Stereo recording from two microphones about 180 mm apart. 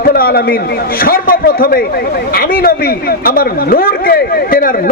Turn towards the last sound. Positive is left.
turn(degrees=55)  # may be behind; listen again after turning